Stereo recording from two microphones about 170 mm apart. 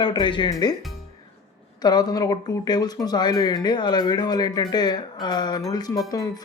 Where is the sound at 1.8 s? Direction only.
25° left (ahead or behind).